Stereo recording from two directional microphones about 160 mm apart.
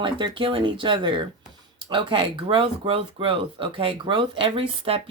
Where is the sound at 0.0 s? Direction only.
30° right (ahead or behind).